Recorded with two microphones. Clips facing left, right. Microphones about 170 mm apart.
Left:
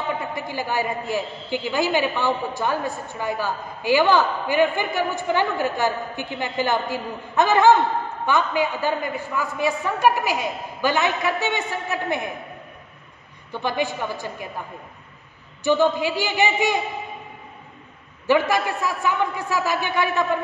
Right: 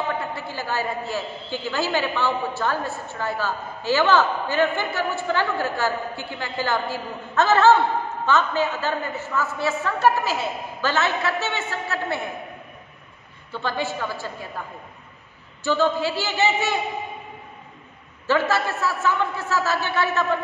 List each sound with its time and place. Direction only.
0.2 s a man's voice: 15° left (ahead or behind)
13.5 s a man's voice: 15° left (ahead or behind)
15.6 s a man's voice: 15° left (ahead or behind)
18.2 s a man's voice: 15° left (ahead or behind)